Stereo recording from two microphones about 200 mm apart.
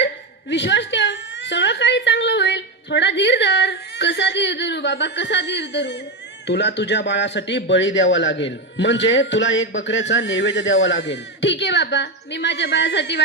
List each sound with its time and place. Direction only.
0.5 s whimper: 65° left (ahead or behind)
6.5 s a man's voice: 60° left (ahead or behind)